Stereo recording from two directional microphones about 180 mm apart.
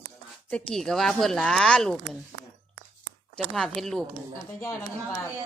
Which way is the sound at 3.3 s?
Centre (ahead or behind).